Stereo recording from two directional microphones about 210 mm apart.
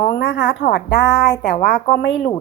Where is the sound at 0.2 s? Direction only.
50° left (ahead or behind).